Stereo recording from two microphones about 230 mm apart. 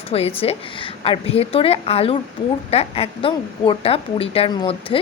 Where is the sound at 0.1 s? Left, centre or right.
Left.